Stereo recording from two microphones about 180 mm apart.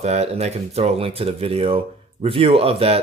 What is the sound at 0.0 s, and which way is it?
Speech, 35° right (ahead or behind).